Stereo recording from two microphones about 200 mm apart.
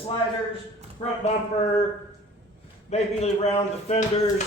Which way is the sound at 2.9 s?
35° left (ahead or behind).